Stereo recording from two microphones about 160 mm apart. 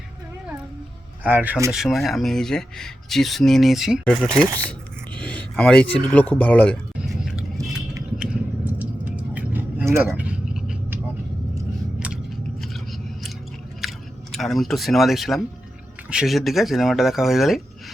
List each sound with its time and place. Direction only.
1.2 s speech: 10° right (ahead or behind)
4.4 s speech: 20° right (ahead or behind)
5.1 s speech: 10° left (ahead or behind)
7.0 s scissors: 5° right (ahead or behind)
8.2 s a sound: 10° right (ahead or behind)
11.9 s chewing: 5° right (ahead or behind)
14.3 s speech: centre (ahead or behind)